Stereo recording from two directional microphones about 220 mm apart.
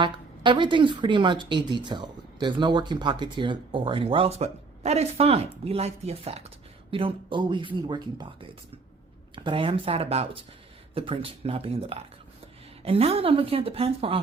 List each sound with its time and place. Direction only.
0.0 s a woman's voice: 20° right (ahead or behind)